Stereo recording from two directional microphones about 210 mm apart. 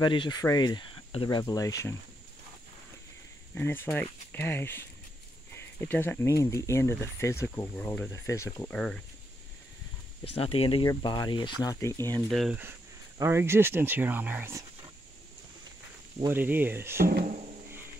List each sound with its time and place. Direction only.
0.0 s speech: 20° left (ahead or behind)
3.5 s speech: 10° left (ahead or behind)
10.3 s speech: 25° left (ahead or behind)
12.3 s speech: centre (ahead or behind)
16.3 s speech: 10° right (ahead or behind)